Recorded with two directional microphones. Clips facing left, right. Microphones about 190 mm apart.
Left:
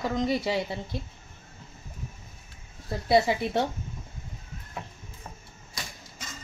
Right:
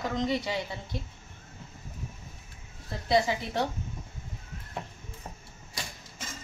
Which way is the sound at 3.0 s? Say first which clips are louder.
Left 3 dB; 25° left (ahead or behind).